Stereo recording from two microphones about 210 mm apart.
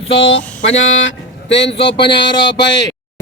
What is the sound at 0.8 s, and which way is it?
Speech, 65° left (ahead or behind).